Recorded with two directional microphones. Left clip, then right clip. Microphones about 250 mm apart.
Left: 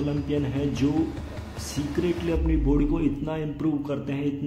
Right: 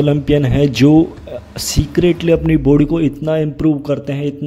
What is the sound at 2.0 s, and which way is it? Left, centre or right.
Speech, right.